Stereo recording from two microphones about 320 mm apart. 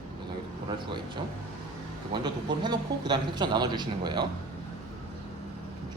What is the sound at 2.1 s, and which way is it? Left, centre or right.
Speech, centre.